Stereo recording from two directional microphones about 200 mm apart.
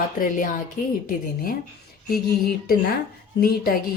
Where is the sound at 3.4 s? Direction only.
50° left (ahead or behind).